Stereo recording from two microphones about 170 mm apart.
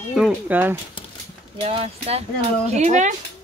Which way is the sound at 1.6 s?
35° right (ahead or behind).